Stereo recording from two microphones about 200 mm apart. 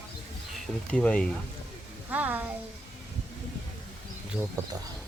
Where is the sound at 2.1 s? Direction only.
10° right (ahead or behind).